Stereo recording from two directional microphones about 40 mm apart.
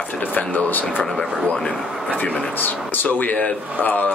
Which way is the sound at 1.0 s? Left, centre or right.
Left.